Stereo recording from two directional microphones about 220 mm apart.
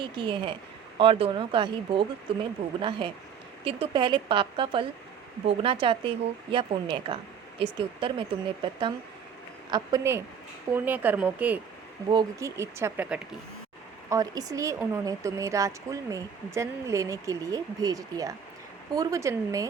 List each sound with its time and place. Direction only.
0.0 s speech: 20° right (ahead or behind)
9.7 s speech: 15° right (ahead or behind)
14.1 s speech: 15° right (ahead or behind)